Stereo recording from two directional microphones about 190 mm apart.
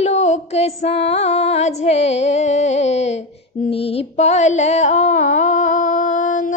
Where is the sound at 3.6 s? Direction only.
30° left (ahead or behind).